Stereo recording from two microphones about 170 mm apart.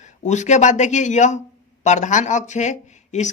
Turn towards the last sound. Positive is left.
turn(degrees=45)  # may be behind; listen again after turning